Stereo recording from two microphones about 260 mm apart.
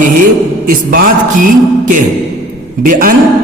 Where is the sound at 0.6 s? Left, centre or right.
Right.